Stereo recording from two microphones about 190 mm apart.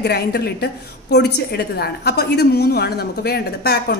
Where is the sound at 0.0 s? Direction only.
55° left (ahead or behind).